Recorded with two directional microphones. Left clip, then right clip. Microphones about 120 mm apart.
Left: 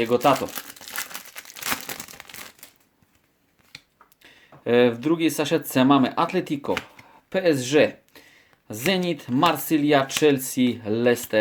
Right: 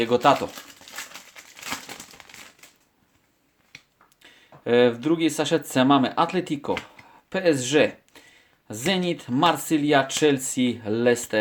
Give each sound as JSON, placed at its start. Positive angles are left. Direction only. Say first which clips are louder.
{"t": 0.0, "sound": "speech", "louder": "right 1 dB", "side_deg": -5}
{"t": 0.5, "sound": "crumpling", "louder": "left 5 dB", "side_deg": 35}
{"t": 4.2, "sound": "speech", "louder": "left 1 dB", "side_deg": 5}